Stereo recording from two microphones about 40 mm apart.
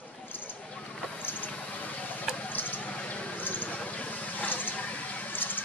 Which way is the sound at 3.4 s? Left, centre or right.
Left.